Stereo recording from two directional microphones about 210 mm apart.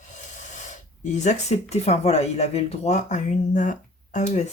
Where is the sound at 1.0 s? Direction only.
35° left (ahead or behind).